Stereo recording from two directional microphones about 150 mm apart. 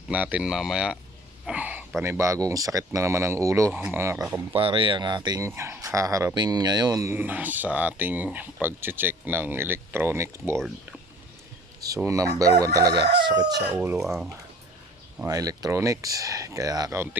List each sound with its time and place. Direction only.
0.1 s a man's voice: 10° right (ahead or behind)
3.7 s speech: 5° right (ahead or behind)
3.9 s a man's voice: 15° right (ahead or behind)
4.5 s speech: 35° right (ahead or behind)
5.5 s a man's voice: 15° right (ahead or behind)
12.0 s speech: 20° right (ahead or behind)
13.7 s a man's voice: 15° right (ahead or behind)
15.3 s speech: 25° right (ahead or behind)